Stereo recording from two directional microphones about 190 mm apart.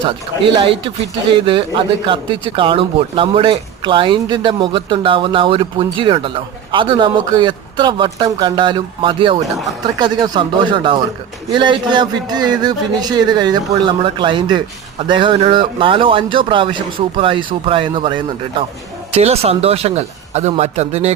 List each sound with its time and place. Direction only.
0.5 s a man's voice: 25° right (ahead or behind)